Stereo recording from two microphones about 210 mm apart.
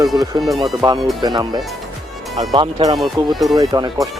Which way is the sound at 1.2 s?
20° right (ahead or behind).